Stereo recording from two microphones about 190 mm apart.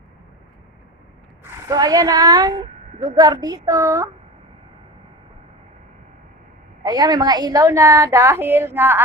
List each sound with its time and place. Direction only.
1.6 s a woman's voice: 20° right (ahead or behind)
6.8 s a woman's voice: 20° right (ahead or behind)